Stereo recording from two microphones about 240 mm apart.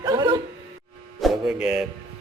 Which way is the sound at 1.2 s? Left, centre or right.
Centre.